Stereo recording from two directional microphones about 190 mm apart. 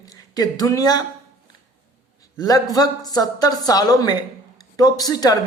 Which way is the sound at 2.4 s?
20° left (ahead or behind).